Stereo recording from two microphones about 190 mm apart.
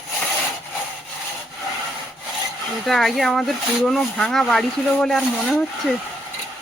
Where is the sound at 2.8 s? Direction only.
Centre (ahead or behind).